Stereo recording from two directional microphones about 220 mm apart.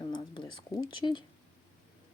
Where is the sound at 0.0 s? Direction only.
20° left (ahead or behind).